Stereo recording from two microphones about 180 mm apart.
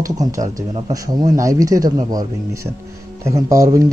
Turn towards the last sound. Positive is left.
turn(degrees=-20)  # may be behind; listen again after turning